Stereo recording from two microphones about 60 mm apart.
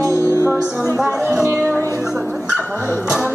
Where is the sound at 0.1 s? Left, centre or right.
Left.